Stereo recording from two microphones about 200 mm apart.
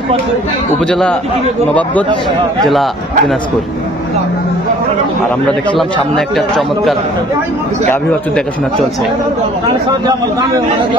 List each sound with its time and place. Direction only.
0.8 s speech: 5° left (ahead or behind)
2.6 s speech: centre (ahead or behind)
5.8 s speech: centre (ahead or behind)